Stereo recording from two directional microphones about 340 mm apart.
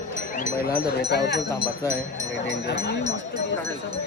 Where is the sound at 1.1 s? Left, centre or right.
Left.